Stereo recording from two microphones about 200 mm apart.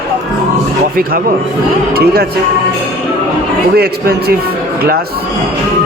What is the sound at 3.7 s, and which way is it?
Speech, 50° right (ahead or behind).